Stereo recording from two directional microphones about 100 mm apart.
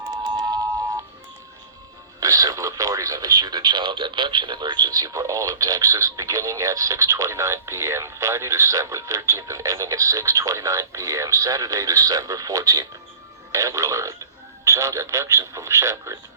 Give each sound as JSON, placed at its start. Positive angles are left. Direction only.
{"t": 2.2, "sound": "speech", "side_deg": -35}